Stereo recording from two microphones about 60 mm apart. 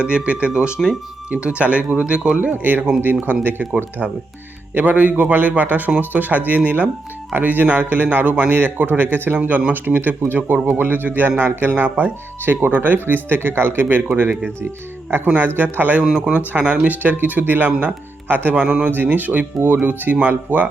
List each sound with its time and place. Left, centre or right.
0.0 s speech: centre
2.5 s speech: right
9.4 s speech: right
13.8 s speech: right
15.4 s speech: right
16.0 s speech: centre
16.5 s speech: right
18.6 s speech: centre
19.0 s speech: right